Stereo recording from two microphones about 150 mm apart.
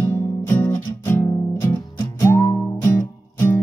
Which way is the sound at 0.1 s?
15° left (ahead or behind).